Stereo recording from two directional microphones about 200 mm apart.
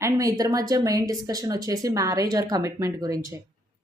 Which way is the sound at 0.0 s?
15° right (ahead or behind).